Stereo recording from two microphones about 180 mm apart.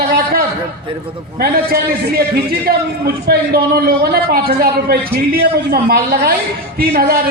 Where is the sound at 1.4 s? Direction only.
60° right (ahead or behind).